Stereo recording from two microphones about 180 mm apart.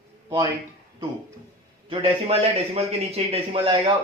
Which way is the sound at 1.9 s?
30° right (ahead or behind).